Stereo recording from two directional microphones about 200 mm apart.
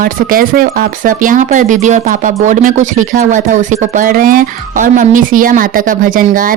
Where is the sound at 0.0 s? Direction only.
45° right (ahead or behind).